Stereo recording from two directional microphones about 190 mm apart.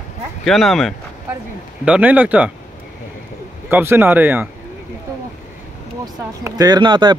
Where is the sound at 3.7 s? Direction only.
10° right (ahead or behind).